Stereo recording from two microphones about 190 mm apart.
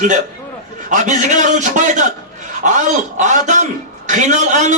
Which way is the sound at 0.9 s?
40° right (ahead or behind).